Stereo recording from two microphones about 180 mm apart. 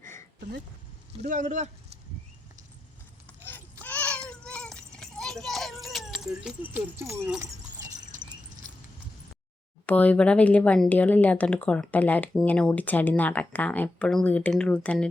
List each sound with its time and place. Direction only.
1.1 s speech: 40° right (ahead or behind)
3.4 s a sound: 10° left (ahead or behind); by 7.3 s 15° right (ahead or behind)
9.8 s speech: 10° left (ahead or behind)